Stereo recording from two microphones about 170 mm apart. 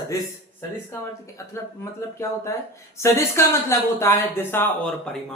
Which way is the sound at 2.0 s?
15° left (ahead or behind).